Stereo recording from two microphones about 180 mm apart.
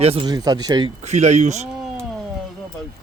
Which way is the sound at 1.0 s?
40° right (ahead or behind).